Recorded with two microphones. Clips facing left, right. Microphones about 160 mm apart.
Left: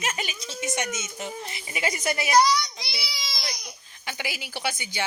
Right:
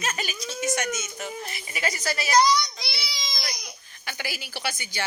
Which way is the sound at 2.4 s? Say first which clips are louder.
Right 1 dB; 5° left (ahead or behind).